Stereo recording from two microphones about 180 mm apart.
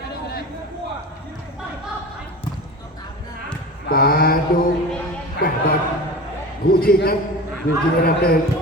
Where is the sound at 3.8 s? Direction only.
55° left (ahead or behind).